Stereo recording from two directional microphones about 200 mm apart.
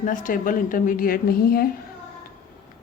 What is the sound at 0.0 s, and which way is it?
A woman's voice, 40° left (ahead or behind).